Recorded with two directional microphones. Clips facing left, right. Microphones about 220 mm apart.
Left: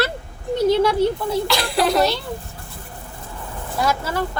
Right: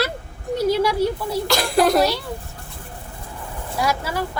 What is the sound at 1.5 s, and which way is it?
Speech, 45° right (ahead or behind).